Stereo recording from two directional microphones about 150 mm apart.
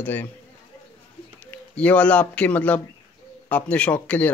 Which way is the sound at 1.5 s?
10° left (ahead or behind).